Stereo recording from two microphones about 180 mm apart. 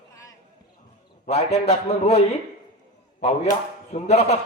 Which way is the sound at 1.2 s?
35° left (ahead or behind).